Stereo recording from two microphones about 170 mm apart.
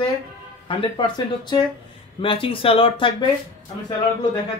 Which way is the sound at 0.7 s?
25° left (ahead or behind).